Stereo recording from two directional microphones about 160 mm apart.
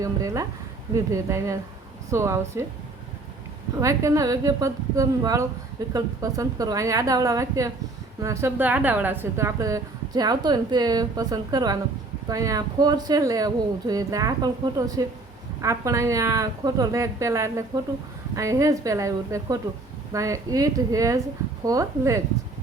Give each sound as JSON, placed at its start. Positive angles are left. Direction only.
{"t": 0.0, "sound": "a woman's voice", "side_deg": -20}
{"t": 3.8, "sound": "a woman's voice", "side_deg": -20}